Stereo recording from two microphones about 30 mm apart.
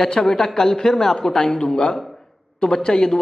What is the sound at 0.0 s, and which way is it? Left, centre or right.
A man's voice, centre.